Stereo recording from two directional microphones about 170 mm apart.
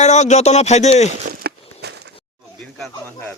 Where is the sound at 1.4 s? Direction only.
75° right (ahead or behind).